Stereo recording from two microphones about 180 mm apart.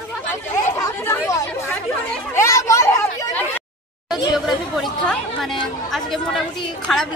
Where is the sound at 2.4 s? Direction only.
15° left (ahead or behind).